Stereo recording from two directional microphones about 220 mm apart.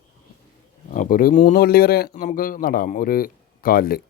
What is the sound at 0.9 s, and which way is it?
Speech, 40° left (ahead or behind).